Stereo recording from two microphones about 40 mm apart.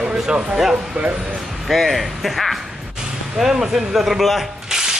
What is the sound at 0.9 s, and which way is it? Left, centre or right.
Speech, right.